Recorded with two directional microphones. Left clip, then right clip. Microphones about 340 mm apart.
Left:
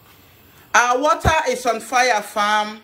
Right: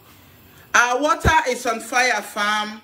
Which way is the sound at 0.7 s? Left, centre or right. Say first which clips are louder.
Left 2 dB; centre.